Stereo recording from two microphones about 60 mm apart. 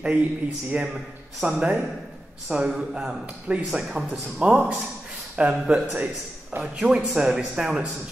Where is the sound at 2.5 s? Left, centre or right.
Centre.